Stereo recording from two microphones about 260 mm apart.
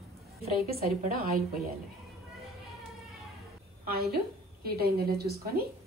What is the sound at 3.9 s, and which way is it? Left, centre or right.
A woman's voice, right.